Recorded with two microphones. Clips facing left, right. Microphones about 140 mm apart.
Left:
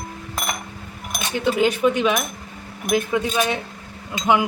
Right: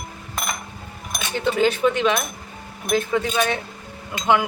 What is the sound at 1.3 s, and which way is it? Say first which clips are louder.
Speech: even; 10° left (ahead or behind).